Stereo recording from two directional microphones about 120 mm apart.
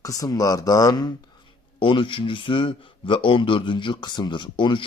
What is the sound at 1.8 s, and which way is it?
Speech, 45° left (ahead or behind).